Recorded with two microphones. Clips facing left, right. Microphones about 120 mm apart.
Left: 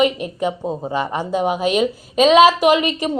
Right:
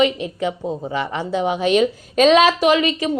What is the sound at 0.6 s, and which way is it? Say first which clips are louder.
Speech: left 1 dB; 40° left (ahead or behind).